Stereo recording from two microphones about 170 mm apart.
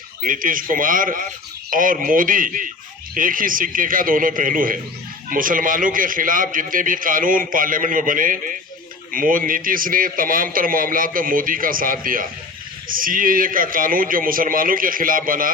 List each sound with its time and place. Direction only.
0.2 s a man's voice: 55° right (ahead or behind)